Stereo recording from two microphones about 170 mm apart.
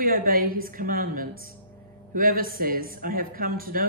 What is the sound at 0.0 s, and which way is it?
Speech, 60° right (ahead or behind).